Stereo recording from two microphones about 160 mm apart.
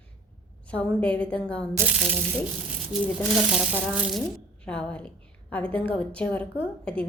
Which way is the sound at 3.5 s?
Centre (ahead or behind).